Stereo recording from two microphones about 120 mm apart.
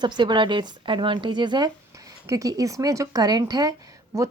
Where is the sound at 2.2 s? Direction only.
25° right (ahead or behind).